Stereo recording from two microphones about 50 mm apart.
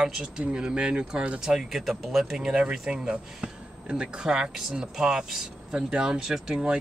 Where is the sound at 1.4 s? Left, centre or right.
Centre.